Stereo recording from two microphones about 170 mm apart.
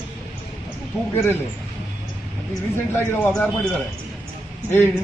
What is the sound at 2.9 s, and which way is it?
A man's voice, 10° left (ahead or behind).